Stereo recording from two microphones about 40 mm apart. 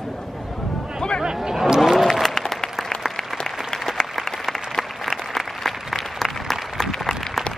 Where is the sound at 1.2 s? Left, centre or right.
Centre.